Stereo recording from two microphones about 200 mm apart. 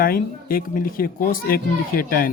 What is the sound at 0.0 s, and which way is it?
Speech, 45° left (ahead or behind).